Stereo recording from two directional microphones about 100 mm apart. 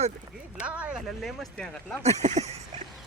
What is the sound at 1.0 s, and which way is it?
Speech, 5° left (ahead or behind).